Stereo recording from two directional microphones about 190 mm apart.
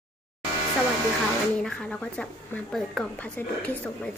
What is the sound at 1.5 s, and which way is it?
A woman's voice, 5° left (ahead or behind).